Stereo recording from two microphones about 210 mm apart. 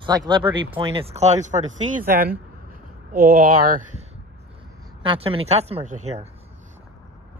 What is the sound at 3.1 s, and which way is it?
Speech, 45° right (ahead or behind).